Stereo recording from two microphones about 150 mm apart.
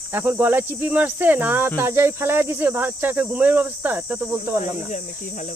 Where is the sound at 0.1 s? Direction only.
15° right (ahead or behind).